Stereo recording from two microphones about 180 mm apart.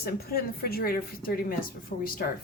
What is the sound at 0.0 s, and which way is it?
A woman's voice, 60° left (ahead or behind).